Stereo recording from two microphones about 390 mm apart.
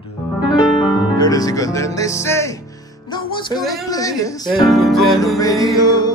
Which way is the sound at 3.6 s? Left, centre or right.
Centre.